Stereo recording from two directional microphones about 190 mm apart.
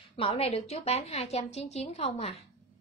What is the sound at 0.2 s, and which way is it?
A woman's voice, 30° left (ahead or behind).